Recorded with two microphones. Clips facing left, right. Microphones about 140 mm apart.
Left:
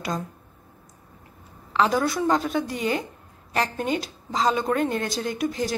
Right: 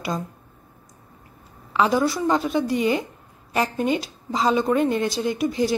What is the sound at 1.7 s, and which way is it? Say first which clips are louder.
Speech: right 2 dB; 5° right (ahead or behind).